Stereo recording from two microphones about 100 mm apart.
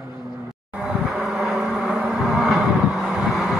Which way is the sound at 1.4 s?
5° right (ahead or behind).